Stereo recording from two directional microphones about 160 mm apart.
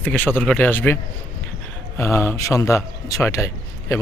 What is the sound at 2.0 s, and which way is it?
Speech, 15° left (ahead or behind).